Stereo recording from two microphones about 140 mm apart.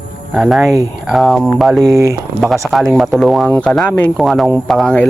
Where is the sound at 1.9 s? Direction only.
20° right (ahead or behind).